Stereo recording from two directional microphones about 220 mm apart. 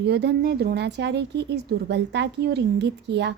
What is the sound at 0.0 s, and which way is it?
A woman's voice, 50° right (ahead or behind).